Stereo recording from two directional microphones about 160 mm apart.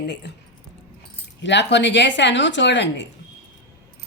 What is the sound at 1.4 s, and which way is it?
Speech, 90° left.